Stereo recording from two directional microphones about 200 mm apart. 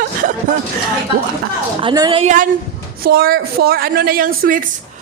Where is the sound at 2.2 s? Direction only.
35° right (ahead or behind).